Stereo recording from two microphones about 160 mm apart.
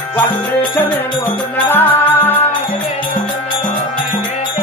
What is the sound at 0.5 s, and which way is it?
Music, 10° left (ahead or behind).